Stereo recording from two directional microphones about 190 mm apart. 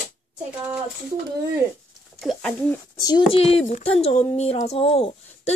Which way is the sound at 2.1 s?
5° left (ahead or behind).